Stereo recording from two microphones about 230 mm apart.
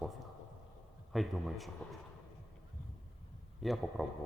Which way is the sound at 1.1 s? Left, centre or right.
Centre.